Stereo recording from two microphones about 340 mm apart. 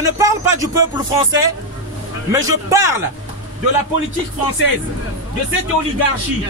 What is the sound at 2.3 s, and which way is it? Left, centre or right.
Speech, centre.